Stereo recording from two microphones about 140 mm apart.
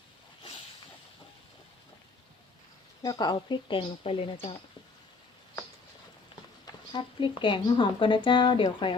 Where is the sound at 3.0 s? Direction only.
30° left (ahead or behind).